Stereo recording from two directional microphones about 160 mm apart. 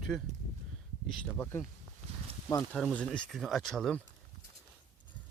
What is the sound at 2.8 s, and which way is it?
Speech, 5° left (ahead or behind).